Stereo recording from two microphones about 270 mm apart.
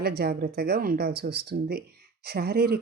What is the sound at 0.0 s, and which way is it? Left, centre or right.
Speech, right.